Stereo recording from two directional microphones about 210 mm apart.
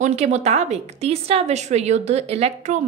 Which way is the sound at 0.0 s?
30° right (ahead or behind).